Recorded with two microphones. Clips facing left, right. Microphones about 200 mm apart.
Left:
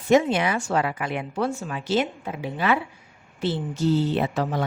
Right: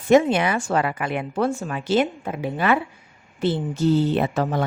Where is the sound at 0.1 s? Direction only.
55° right (ahead or behind).